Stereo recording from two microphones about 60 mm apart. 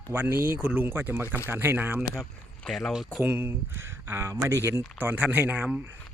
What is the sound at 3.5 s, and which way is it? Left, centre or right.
Speech, right.